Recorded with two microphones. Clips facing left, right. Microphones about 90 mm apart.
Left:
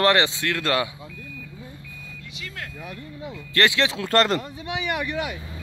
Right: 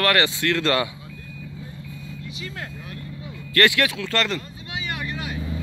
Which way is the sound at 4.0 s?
40° left (ahead or behind).